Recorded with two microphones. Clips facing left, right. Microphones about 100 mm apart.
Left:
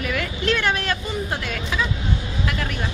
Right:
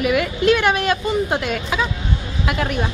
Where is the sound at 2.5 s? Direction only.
35° right (ahead or behind).